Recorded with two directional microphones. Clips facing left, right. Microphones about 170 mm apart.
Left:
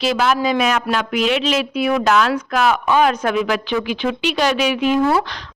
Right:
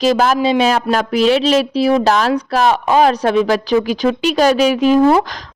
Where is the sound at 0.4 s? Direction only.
30° right (ahead or behind).